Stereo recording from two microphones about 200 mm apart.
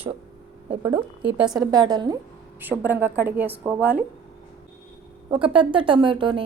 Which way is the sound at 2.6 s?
10° right (ahead or behind).